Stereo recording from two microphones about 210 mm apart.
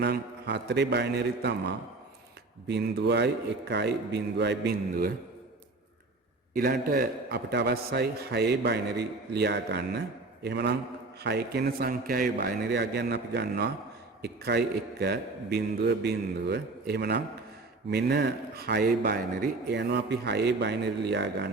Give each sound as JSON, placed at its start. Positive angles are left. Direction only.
{"t": 0.0, "sound": "a man's voice", "side_deg": -55}
{"t": 6.5, "sound": "a man's voice", "side_deg": -45}